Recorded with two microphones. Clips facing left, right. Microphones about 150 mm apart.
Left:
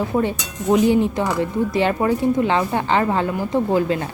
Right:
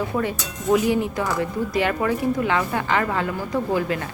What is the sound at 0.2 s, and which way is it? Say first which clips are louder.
Speech: left 4 dB; 30° left (ahead or behind).